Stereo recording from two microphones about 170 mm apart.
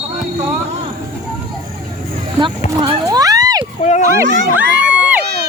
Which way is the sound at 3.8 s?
45° left (ahead or behind).